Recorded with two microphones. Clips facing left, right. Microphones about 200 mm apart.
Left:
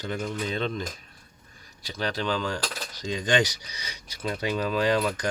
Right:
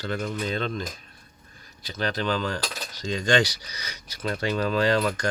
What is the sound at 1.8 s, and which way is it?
Speech, 10° left (ahead or behind).